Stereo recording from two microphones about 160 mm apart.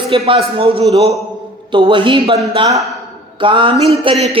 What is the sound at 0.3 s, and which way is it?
A man's voice, 35° right (ahead or behind).